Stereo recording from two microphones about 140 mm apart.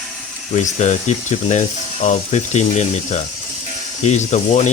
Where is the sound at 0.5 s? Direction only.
60° left (ahead or behind).